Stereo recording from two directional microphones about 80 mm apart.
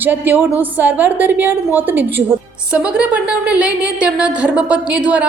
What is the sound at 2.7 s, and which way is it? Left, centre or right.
A woman's voice, centre.